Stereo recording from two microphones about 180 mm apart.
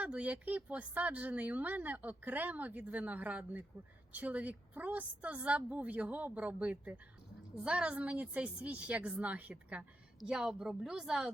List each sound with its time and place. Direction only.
0.0 s a woman's voice: 5° right (ahead or behind)